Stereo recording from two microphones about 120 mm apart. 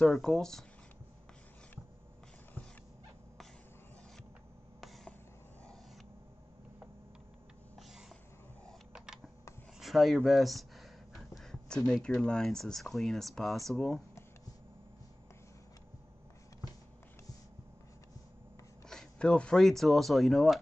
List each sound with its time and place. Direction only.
0.0 s speech: 5° left (ahead or behind)
4.7 s a sound: centre (ahead or behind)
8.9 s computer keyboard: 5° right (ahead or behind)
9.8 s a sound: centre (ahead or behind)
10.2 s speech: centre (ahead or behind)
18.9 s speech: 5° left (ahead or behind)